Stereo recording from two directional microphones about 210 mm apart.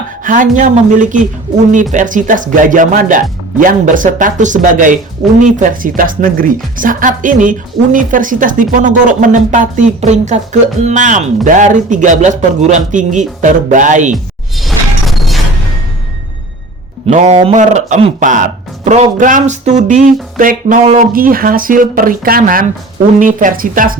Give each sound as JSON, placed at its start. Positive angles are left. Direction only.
{"t": 0.3, "sound": "speech", "side_deg": -40}
{"t": 14.5, "sound": "a sound", "side_deg": 0}
{"t": 17.1, "sound": "speech", "side_deg": -35}